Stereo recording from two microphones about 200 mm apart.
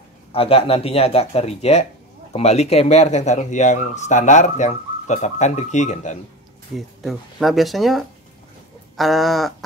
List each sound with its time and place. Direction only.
0.3 s speech: 30° left (ahead or behind)
7.0 s speech: centre (ahead or behind)